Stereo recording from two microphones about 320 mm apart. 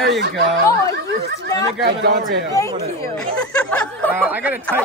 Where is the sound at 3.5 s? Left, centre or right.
Centre.